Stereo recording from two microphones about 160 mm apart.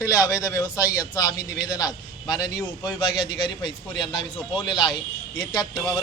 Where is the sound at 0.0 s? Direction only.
20° left (ahead or behind).